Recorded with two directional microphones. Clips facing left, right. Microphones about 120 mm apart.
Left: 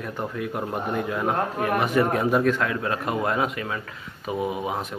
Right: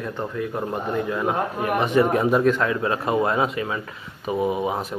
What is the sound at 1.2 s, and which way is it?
Speech, 10° right (ahead or behind).